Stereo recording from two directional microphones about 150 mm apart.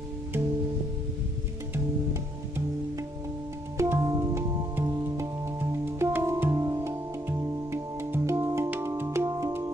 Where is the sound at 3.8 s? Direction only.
20° right (ahead or behind).